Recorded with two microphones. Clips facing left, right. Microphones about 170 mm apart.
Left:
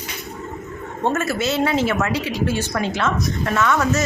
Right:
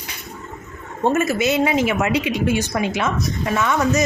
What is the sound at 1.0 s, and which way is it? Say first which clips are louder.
A woman's voice: right 3 dB; 10° right (ahead or behind).